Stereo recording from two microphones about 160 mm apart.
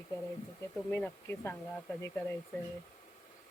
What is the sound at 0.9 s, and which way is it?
Speech, 15° left (ahead or behind).